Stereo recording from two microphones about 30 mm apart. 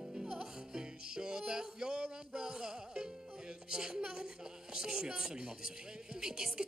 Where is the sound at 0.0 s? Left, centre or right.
Right.